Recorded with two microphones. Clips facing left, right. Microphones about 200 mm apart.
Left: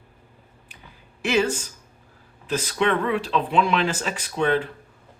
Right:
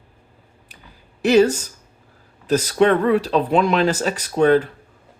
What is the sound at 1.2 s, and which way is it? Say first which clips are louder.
Speech: right 8 dB; 40° right (ahead or behind).